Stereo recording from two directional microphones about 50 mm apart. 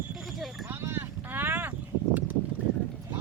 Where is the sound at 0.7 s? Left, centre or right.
Right.